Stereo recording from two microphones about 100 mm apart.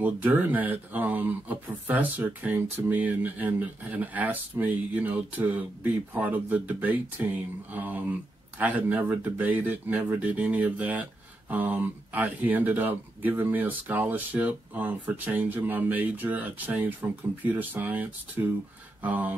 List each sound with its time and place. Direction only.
0.0 s speech: 15° right (ahead or behind)